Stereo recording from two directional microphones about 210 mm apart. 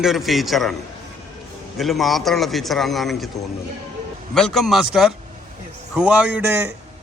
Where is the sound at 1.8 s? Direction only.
Centre (ahead or behind).